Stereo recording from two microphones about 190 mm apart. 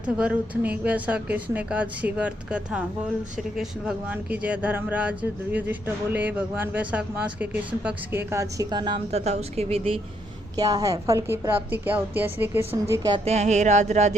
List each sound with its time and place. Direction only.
0.0 s speech: 5° right (ahead or behind); by 10.0 s 30° right (ahead or behind)
10.6 s a woman's voice: 20° right (ahead or behind)
13.2 s a sound: 35° right (ahead or behind)